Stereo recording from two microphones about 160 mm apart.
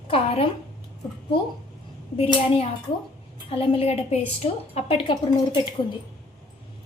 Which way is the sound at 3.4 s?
35° left (ahead or behind).